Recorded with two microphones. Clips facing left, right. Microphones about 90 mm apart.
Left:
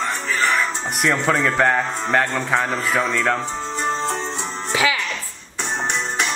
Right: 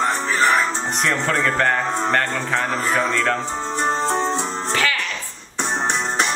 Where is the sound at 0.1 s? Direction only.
30° right (ahead or behind).